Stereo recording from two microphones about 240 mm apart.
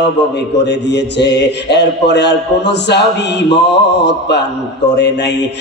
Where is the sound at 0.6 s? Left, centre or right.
Left.